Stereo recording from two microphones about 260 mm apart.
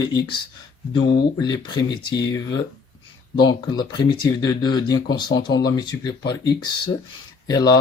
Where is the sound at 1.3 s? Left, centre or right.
Centre.